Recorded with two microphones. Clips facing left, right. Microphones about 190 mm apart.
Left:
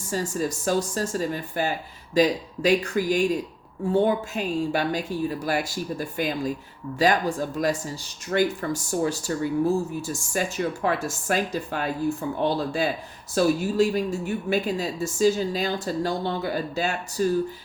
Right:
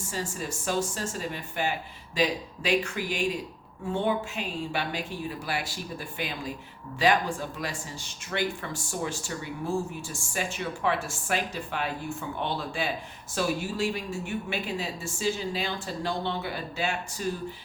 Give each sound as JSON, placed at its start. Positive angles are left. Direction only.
{"t": 0.1, "sound": "a woman's voice", "side_deg": 40}